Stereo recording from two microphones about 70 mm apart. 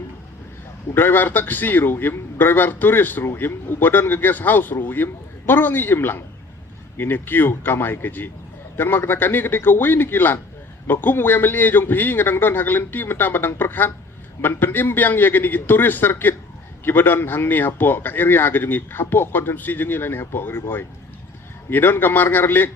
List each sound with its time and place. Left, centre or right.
0.9 s a man's voice: left
21.7 s a man's voice: left